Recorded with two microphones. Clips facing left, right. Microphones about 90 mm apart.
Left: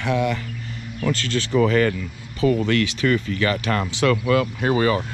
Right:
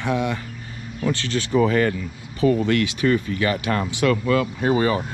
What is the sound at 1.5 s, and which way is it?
Speech, 30° right (ahead or behind).